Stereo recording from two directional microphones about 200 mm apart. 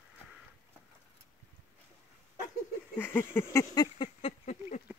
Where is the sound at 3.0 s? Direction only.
10° left (ahead or behind); by 4.8 s 35° left (ahead or behind).